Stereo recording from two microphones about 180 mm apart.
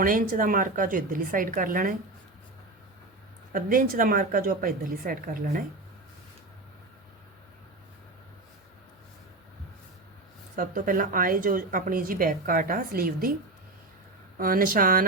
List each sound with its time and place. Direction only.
0.0 s a woman's voice: 50° right (ahead or behind)
3.5 s a woman's voice: 50° right (ahead or behind)
10.5 s a woman's voice: 50° right (ahead or behind)
14.3 s a woman's voice: 55° right (ahead or behind)